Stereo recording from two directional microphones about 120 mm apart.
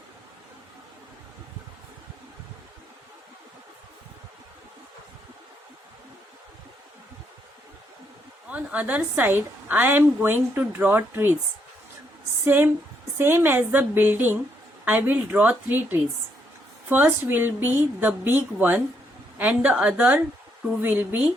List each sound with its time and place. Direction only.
8.4 s a woman's voice: 10° right (ahead or behind)
12.5 s a woman's voice: 20° right (ahead or behind)